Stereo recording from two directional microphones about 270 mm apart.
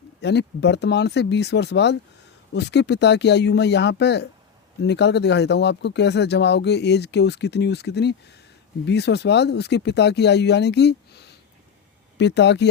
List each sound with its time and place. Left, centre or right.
0.2 s speech: left